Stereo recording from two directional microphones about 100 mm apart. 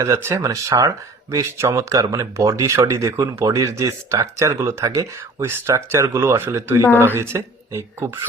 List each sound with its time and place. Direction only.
0.0 s speech: 25° right (ahead or behind)